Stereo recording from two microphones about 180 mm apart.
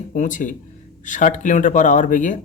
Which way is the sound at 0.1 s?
45° left (ahead or behind).